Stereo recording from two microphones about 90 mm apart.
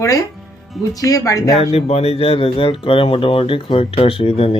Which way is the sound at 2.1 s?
90° left.